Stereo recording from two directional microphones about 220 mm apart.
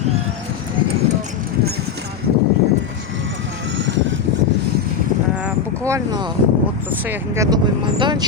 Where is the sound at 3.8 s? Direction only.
55° right (ahead or behind).